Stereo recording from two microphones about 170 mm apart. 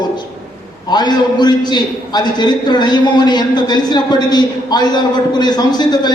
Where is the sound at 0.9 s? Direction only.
25° left (ahead or behind).